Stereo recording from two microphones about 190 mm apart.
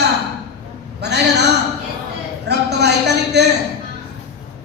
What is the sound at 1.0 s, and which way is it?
Speech, 60° right (ahead or behind).